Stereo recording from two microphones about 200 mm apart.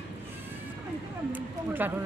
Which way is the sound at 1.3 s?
10° right (ahead or behind).